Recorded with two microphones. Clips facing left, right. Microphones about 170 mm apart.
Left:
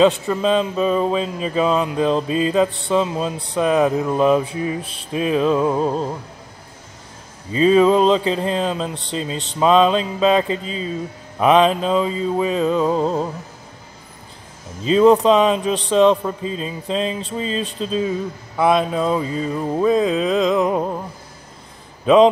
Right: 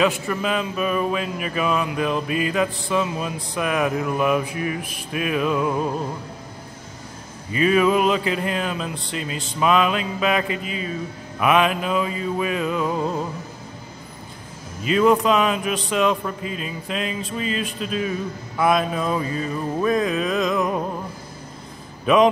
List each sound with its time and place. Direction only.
0.0 s a man's voice: 25° left (ahead or behind)
7.5 s a man's voice: 25° left (ahead or behind)
14.8 s a man's voice: 30° left (ahead or behind)
22.0 s speech: 25° left (ahead or behind)